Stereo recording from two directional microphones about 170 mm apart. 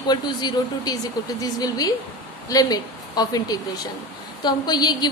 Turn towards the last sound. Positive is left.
turn(degrees=25)  # may be behind; listen again after turning